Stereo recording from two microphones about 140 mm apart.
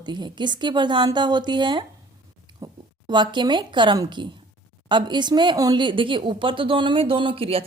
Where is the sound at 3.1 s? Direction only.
35° right (ahead or behind).